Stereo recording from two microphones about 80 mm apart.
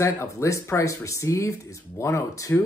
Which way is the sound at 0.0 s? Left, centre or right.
Left.